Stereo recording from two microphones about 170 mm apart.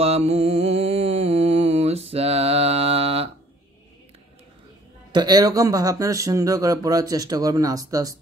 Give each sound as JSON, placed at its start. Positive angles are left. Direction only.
{"t": 0.0, "sound": "mantra", "side_deg": -35}
{"t": 5.1, "sound": "speech", "side_deg": -25}